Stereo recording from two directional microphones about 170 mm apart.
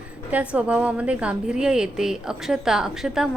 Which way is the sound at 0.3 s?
10° right (ahead or behind).